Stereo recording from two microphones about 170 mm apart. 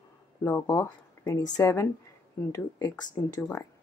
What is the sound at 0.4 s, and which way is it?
A woman's voice, 15° left (ahead or behind).